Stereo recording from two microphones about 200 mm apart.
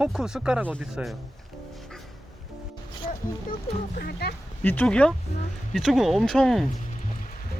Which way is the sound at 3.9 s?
50° left (ahead or behind).